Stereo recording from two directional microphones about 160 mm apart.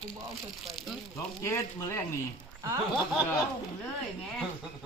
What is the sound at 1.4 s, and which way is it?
Speech, 15° left (ahead or behind).